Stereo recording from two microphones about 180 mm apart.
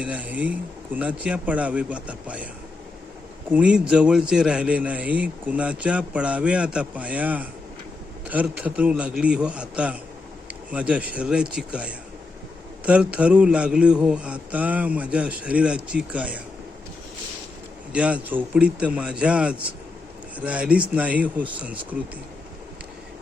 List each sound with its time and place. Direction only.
0.0 s a man's voice: 5° right (ahead or behind)
3.5 s a man's voice: 5° right (ahead or behind)
17.9 s a man's voice: 5° right (ahead or behind)